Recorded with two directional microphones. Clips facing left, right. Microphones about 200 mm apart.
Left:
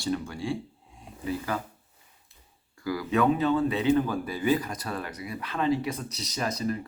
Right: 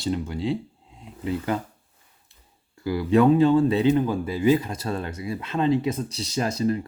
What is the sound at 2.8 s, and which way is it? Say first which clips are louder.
Speech: right 6 dB; 30° right (ahead or behind).